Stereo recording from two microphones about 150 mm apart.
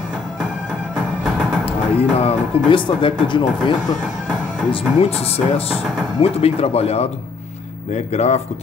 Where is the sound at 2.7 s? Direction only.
35° left (ahead or behind).